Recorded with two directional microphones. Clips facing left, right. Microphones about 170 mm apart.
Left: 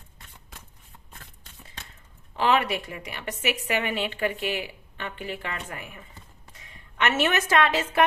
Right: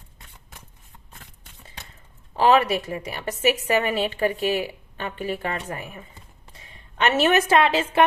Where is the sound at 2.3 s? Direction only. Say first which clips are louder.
Right 5 dB; 35° right (ahead or behind).